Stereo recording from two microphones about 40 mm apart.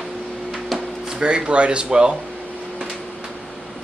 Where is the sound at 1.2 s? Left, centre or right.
Right.